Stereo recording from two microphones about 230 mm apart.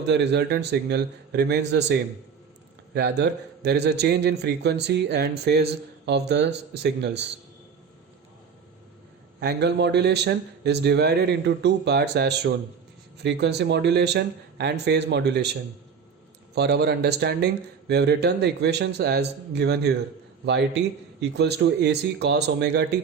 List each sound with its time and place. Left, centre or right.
0.0 s speech: right
9.4 s speech: right
16.6 s speech: right